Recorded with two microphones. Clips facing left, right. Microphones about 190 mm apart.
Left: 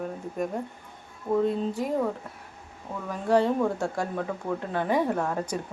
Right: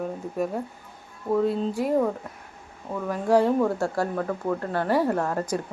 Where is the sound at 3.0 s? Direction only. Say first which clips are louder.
Right 2 dB; 10° right (ahead or behind).